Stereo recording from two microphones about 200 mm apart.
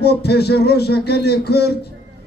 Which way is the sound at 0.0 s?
55° left (ahead or behind).